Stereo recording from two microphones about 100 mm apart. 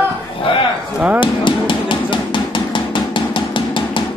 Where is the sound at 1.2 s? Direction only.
55° left (ahead or behind).